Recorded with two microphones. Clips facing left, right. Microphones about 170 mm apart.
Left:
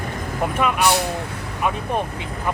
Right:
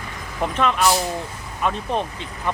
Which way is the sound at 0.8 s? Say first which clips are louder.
Even; 65° left (ahead or behind).